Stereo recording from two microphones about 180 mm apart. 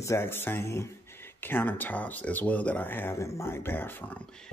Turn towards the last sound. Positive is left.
turn(degrees=5)  # may be behind; listen again after turning